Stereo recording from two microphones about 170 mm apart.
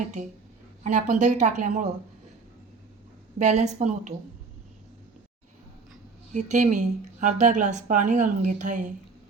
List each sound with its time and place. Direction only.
0.9 s a woman's voice: 45° right (ahead or behind)
3.3 s a woman's voice: 40° right (ahead or behind)
6.3 s a woman's voice: 45° right (ahead or behind)